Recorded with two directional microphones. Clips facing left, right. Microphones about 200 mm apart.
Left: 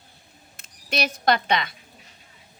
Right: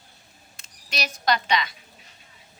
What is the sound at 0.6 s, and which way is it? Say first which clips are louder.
A woman's voice: left 6 dB; 55° left (ahead or behind).